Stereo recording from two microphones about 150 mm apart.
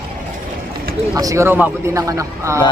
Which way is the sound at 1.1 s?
20° right (ahead or behind).